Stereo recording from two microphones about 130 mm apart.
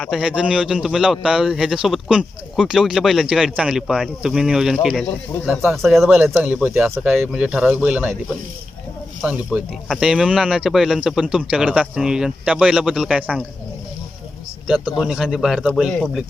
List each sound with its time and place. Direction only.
0.0 s a man's voice: 5° right (ahead or behind)
6.4 s a man's voice: 10° right (ahead or behind)
14.7 s a man's voice: 5° right (ahead or behind)